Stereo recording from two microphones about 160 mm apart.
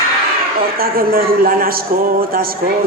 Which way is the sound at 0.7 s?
65° right (ahead or behind).